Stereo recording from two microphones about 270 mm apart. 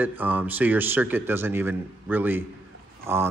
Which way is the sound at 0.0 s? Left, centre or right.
Centre.